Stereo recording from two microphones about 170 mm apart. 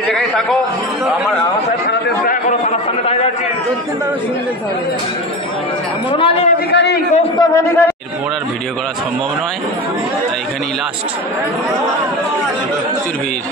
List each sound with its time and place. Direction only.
1.0 s speech: 5° right (ahead or behind)
6.1 s a man's voice: 35° left (ahead or behind)
6.7 s a man's voice: 80° left
7.3 s a man's voice: 15° left (ahead or behind)